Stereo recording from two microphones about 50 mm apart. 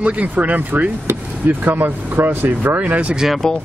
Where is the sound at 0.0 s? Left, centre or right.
Right.